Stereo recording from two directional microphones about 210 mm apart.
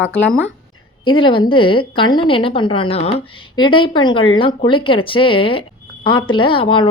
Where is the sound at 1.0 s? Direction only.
25° left (ahead or behind).